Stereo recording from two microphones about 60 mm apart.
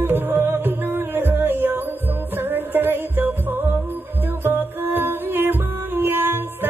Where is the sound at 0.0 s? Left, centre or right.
Right.